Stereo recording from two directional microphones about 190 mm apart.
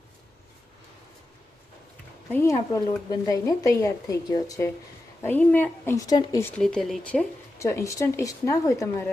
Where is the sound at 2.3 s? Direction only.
15° left (ahead or behind).